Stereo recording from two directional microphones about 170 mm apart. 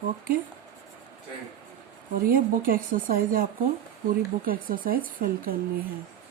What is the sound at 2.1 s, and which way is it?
Speech, 55° right (ahead or behind).